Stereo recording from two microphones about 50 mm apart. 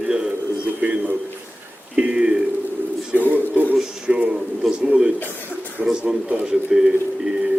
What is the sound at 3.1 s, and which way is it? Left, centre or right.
Speech, left.